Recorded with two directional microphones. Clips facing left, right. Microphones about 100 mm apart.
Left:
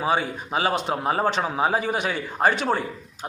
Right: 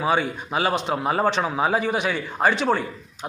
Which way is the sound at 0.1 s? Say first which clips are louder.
Right 1 dB; 35° left (ahead or behind).